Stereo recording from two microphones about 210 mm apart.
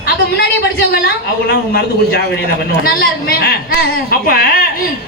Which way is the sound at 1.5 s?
45° left (ahead or behind).